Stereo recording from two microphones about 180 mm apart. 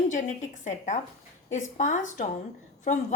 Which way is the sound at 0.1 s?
45° left (ahead or behind).